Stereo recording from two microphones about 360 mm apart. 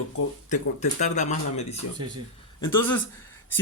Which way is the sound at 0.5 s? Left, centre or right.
Centre.